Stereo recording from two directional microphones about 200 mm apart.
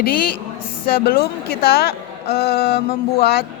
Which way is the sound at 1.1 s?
50° left (ahead or behind).